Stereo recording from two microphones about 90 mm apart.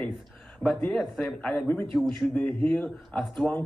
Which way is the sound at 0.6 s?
30° right (ahead or behind).